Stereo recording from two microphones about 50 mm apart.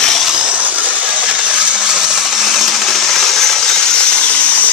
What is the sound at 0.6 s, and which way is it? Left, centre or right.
Coin, right.